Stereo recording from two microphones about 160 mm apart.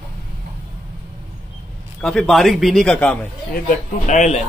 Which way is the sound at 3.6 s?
50° left (ahead or behind).